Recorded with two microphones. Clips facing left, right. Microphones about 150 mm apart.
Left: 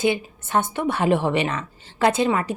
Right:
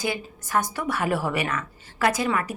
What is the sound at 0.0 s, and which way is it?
A woman's voice, 25° left (ahead or behind).